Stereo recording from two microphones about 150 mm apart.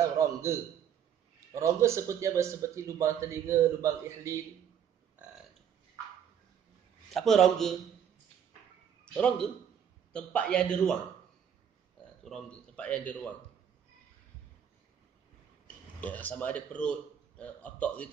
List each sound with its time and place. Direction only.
0.2 s a sound: 20° right (ahead or behind)
1.5 s speech: 20° right (ahead or behind)
7.1 s a man's voice: centre (ahead or behind)
9.0 s a man's voice: 5° left (ahead or behind)
12.2 s speech: 5° left (ahead or behind)
15.6 s a man's voice: 10° left (ahead or behind)